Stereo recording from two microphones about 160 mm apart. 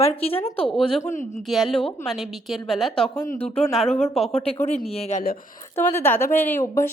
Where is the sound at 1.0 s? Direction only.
50° left (ahead or behind).